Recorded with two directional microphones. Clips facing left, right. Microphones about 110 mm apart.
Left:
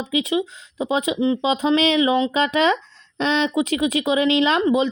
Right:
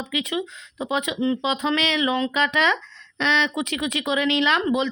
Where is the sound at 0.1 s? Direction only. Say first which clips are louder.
Left 7 dB; 30° left (ahead or behind).